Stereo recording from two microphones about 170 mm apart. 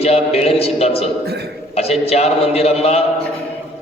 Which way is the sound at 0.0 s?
35° left (ahead or behind).